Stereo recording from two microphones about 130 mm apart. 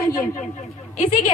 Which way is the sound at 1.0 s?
65° left (ahead or behind).